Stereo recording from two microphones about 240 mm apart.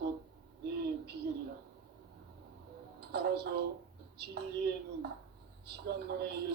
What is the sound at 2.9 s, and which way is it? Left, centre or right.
Speech, right.